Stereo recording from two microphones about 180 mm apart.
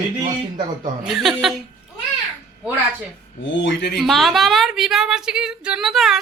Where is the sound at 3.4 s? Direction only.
85° left.